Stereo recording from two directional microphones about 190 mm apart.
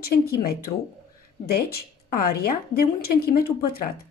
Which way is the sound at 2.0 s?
50° left (ahead or behind).